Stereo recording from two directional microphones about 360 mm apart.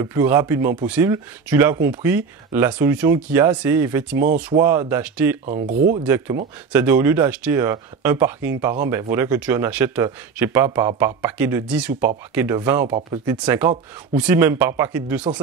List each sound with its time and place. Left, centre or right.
0.0 s speech: centre
4.2 s speech: right
4.6 s speech: centre
5.4 s speech: right
6.0 s speech: centre